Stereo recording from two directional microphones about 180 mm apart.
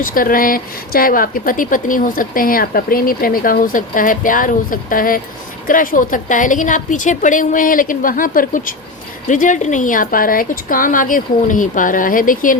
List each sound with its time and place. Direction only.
0.0 s speech: 50° left (ahead or behind)